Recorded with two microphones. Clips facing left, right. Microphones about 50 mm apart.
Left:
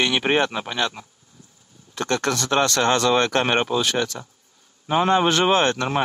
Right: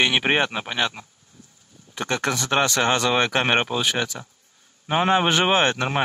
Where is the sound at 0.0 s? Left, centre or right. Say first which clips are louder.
Even; centre.